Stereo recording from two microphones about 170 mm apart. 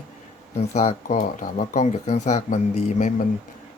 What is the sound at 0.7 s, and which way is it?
Speech, 45° left (ahead or behind).